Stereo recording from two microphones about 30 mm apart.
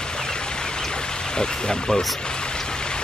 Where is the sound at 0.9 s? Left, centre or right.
Left.